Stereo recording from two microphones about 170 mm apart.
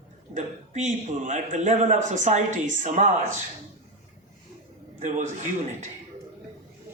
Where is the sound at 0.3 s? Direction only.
45° right (ahead or behind).